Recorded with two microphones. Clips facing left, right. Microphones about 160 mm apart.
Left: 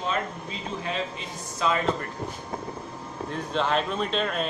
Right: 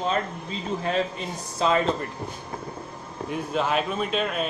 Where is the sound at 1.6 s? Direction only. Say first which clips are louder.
Right 3 dB; 30° right (ahead or behind).